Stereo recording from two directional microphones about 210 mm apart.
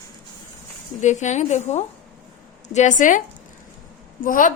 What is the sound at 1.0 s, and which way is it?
A woman's voice, 35° left (ahead or behind).